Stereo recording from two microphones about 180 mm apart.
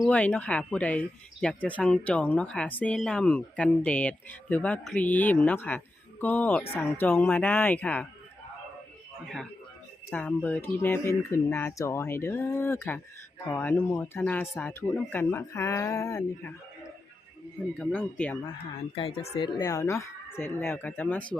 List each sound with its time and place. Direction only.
0.0 s speech: 5° left (ahead or behind)
9.2 s a man's voice: centre (ahead or behind)
17.7 s speech: 5° left (ahead or behind)
18.9 s speech: 35° left (ahead or behind); by 21.2 s 10° left (ahead or behind)